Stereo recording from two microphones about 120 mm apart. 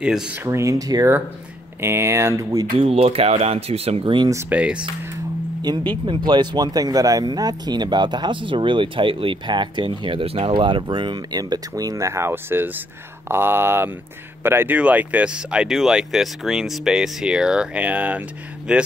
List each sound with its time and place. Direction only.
0.0 s speech: 5° right (ahead or behind)
0.4 s speech: 25° right (ahead or behind)
2.8 s speech: 55° right (ahead or behind)
4.0 s speech: 40° right (ahead or behind)
4.5 s speech: 10° right (ahead or behind)
5.6 s speech: 40° right (ahead or behind); by 18.8 s 5° right (ahead or behind)